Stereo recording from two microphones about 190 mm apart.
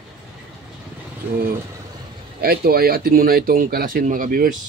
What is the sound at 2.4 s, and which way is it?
Speech, 55° right (ahead or behind).